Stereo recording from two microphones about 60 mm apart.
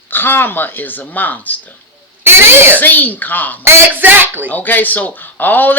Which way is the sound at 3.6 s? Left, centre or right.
Right.